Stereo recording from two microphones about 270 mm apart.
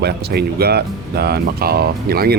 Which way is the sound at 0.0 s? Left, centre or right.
Right.